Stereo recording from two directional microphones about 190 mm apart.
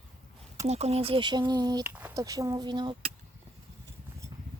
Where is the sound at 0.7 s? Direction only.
35° right (ahead or behind).